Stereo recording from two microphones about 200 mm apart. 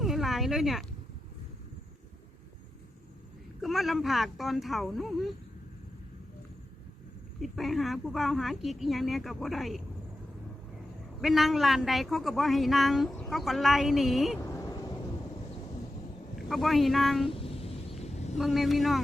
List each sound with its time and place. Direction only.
0.0 s a sound: centre (ahead or behind)
3.6 s speech: centre (ahead or behind)
7.3 s speech: centre (ahead or behind)
11.2 s speech: centre (ahead or behind)
14.3 s vehicle: 15° left (ahead or behind)
16.5 s speech: centre (ahead or behind)
17.2 s a sound: 25° left (ahead or behind)
18.3 s speech: centre (ahead or behind)